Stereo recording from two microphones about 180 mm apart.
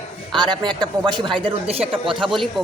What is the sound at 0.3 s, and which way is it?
A man's voice, 25° right (ahead or behind).